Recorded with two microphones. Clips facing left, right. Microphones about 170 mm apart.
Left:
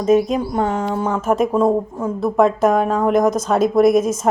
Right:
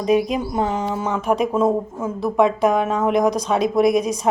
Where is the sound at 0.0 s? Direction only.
40° left (ahead or behind).